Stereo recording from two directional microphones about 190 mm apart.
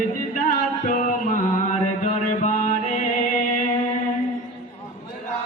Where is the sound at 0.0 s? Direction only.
45° left (ahead or behind).